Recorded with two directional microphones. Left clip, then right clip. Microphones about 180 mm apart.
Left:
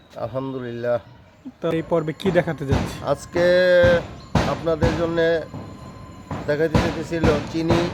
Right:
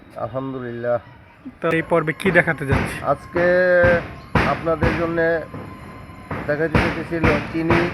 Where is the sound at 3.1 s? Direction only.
25° left (ahead or behind).